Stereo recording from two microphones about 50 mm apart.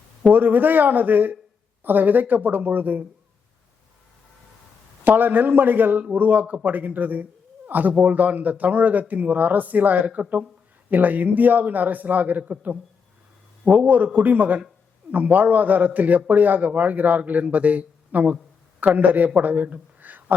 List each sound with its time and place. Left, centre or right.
0.3 s speech: right
5.0 s speech: right
19.4 s a sound: right